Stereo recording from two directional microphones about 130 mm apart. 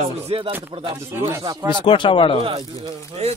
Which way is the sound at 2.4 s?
35° right (ahead or behind).